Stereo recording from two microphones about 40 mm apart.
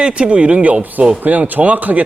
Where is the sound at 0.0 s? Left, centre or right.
Right.